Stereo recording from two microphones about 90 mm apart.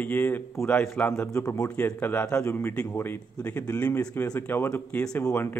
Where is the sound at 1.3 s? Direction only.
35° left (ahead or behind).